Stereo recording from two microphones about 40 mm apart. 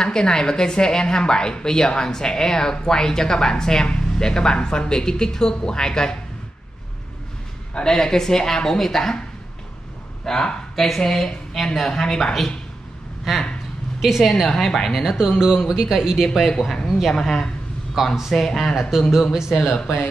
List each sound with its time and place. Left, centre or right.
0.0 s a woman's voice: centre
7.8 s a woman's voice: centre
10.2 s a woman's voice: centre
14.3 s a woman's voice: centre
14.9 s speech: centre
17.1 s a woman's voice: centre
18.0 s speech: centre
18.3 s a woman's voice: centre
18.9 s speech: centre